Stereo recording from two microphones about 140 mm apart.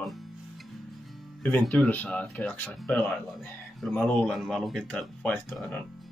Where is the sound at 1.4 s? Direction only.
10° left (ahead or behind).